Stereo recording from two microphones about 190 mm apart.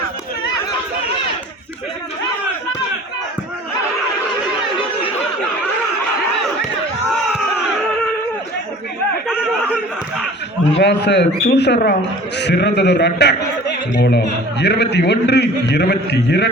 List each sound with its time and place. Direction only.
9.2 s a sound: 5° right (ahead or behind)
10.8 s a man's voice: 60° left (ahead or behind)
14.6 s a man's voice: 60° left (ahead or behind)